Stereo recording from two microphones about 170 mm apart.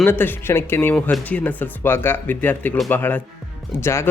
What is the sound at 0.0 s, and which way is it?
Speech, 10° left (ahead or behind).